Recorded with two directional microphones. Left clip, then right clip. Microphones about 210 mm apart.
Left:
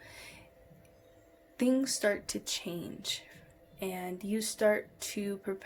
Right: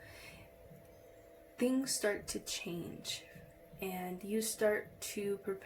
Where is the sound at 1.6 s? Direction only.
60° left (ahead or behind).